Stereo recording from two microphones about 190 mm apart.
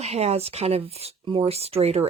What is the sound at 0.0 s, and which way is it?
Speech, 35° right (ahead or behind).